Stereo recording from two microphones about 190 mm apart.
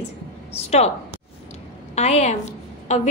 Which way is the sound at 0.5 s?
35° left (ahead or behind).